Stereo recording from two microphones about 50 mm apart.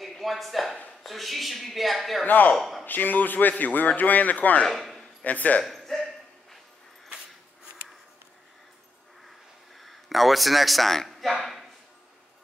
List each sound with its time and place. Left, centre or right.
0.0 s speech: centre
2.2 s a man's voice: left
2.5 s speech: centre
2.8 s a man's voice: left
4.6 s speech: centre
5.2 s a man's voice: left
5.6 s a sound: centre
9.8 s speech: centre